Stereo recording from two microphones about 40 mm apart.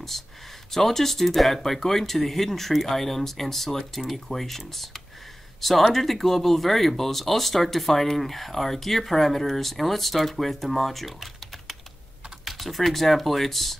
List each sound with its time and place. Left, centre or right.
0.1 s speech: centre
12.4 s speech: centre